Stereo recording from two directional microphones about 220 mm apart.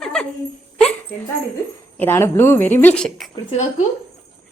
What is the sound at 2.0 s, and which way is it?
Speech, 10° left (ahead or behind).